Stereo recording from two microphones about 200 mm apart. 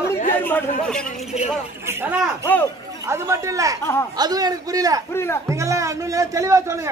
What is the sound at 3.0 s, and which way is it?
Speech, 15° right (ahead or behind).